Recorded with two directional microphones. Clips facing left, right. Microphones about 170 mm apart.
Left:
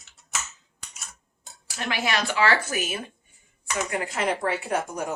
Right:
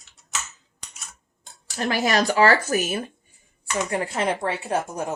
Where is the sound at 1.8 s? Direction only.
40° right (ahead or behind).